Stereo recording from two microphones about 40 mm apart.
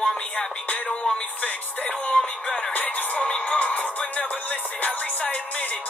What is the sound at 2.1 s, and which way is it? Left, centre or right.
Music, centre.